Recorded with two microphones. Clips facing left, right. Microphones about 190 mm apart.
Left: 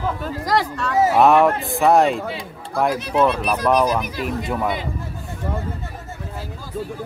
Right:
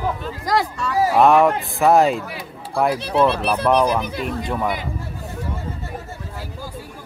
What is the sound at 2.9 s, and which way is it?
Speech, 30° right (ahead or behind).